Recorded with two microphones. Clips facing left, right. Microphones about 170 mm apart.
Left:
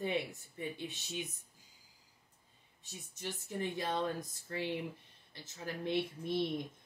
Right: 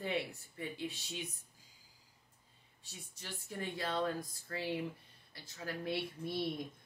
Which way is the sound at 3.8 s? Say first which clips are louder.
Right 2 dB; 20° left (ahead or behind).